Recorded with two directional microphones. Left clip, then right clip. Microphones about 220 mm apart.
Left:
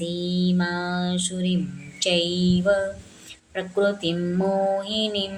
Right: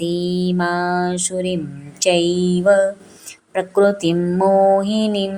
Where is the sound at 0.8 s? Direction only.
35° right (ahead or behind).